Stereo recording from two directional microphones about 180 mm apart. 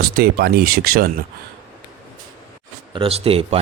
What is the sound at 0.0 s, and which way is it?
Speech, 60° right (ahead or behind).